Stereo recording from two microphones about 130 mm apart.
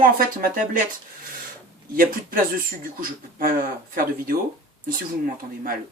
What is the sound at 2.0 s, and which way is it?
Speech, 90° right.